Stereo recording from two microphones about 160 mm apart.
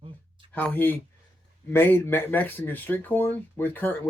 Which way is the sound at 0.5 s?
10° left (ahead or behind).